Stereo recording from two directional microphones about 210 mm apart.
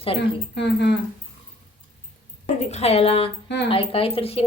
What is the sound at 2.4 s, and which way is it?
A woman's voice, 30° left (ahead or behind).